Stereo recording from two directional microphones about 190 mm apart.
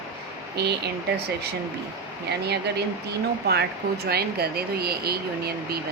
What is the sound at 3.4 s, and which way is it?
Speech, 60° right (ahead or behind).